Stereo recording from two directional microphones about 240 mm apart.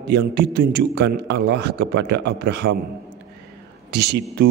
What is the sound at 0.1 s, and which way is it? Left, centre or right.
Speech, right.